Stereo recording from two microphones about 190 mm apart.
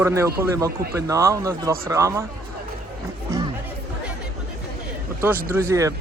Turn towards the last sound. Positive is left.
turn(degrees=-15)  # may be behind; listen again after turning